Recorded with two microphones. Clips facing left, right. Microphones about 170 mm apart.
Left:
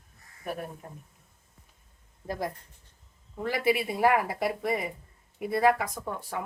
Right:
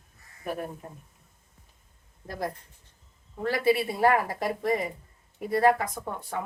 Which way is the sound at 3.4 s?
15° left (ahead or behind).